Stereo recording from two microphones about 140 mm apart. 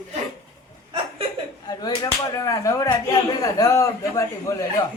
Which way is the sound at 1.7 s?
30° left (ahead or behind).